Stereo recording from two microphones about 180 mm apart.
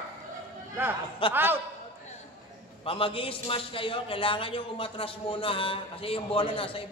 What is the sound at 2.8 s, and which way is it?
A man's voice, 30° left (ahead or behind).